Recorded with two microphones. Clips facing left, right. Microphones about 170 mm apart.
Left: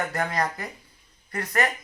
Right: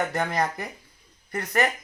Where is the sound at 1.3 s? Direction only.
25° right (ahead or behind).